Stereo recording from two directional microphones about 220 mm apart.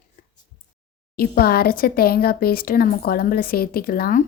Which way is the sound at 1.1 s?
45° left (ahead or behind).